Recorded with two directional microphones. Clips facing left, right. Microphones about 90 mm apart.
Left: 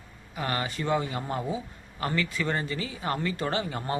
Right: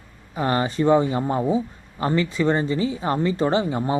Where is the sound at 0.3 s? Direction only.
30° right (ahead or behind).